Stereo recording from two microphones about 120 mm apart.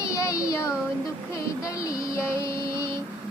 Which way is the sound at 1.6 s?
30° left (ahead or behind).